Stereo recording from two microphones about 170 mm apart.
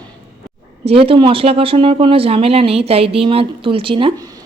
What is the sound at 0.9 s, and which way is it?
Speech, 35° right (ahead or behind).